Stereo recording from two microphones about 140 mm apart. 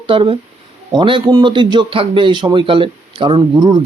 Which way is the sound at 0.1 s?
40° right (ahead or behind).